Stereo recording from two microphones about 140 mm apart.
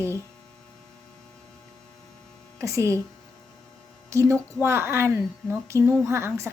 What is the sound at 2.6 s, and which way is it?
Speech, 20° right (ahead or behind).